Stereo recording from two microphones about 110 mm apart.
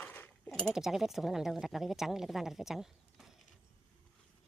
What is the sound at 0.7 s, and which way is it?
Speech, 5° right (ahead or behind).